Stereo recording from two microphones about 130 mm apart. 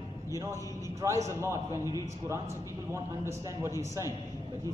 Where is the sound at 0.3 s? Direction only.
25° right (ahead or behind).